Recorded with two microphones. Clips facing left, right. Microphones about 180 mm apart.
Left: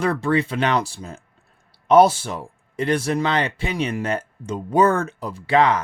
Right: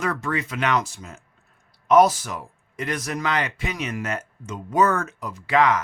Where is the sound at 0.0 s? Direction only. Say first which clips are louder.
Left 6 dB; 30° left (ahead or behind).